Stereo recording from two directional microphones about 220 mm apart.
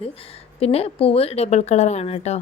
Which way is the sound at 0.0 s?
25° left (ahead or behind).